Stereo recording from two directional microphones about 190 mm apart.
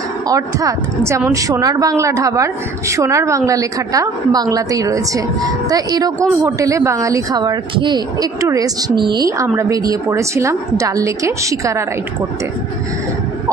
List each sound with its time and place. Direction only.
0.3 s speech: 15° right (ahead or behind)